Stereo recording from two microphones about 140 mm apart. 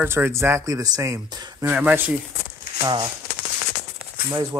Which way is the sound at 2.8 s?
25° right (ahead or behind).